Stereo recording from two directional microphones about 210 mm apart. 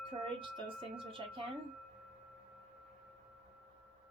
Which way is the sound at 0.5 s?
25° right (ahead or behind).